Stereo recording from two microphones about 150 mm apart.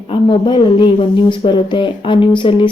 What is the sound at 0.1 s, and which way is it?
Speech, 35° left (ahead or behind).